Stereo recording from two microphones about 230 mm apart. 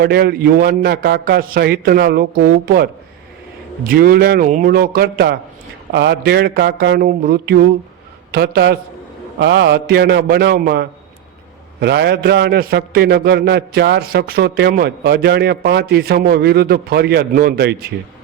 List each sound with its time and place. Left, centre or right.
0.0 s a man's voice: right